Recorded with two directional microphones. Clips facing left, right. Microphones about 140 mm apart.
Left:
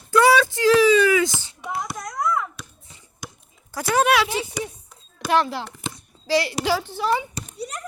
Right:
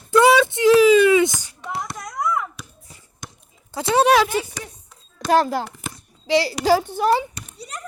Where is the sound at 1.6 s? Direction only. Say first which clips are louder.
Even; 10° left (ahead or behind).